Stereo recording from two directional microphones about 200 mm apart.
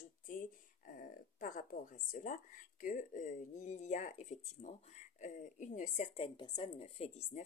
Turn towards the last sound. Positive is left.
turn(degrees=30)  # may be behind; listen again after turning